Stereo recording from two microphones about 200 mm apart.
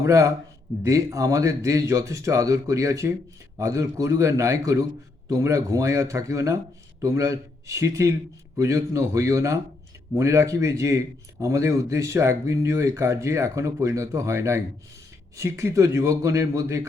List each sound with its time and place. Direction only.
0.0 s speech: 15° right (ahead or behind)